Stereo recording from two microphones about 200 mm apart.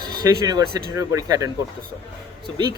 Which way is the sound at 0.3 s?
20° right (ahead or behind).